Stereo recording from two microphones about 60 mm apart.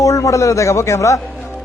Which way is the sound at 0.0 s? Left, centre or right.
Left.